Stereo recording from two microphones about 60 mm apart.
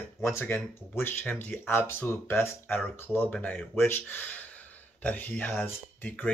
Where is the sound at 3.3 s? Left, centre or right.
Left.